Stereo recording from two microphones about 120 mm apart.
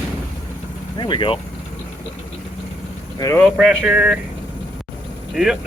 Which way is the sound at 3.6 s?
5° right (ahead or behind).